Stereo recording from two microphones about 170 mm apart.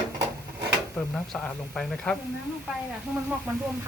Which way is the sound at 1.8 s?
5° left (ahead or behind).